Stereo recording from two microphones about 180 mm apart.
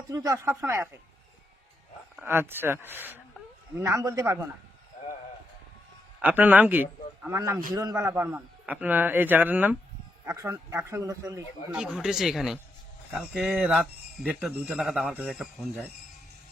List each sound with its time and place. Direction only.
0.1 s a man's voice: 20° right (ahead or behind)
2.2 s a man's voice: 15° right (ahead or behind)
6.2 s a man's voice: 10° right (ahead or behind)
11.7 s a man's voice: 5° right (ahead or behind)